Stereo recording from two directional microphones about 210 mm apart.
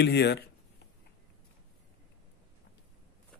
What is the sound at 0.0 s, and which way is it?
Speech, 55° left (ahead or behind).